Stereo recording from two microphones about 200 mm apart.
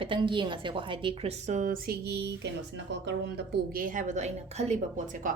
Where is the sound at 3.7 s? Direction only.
40° right (ahead or behind).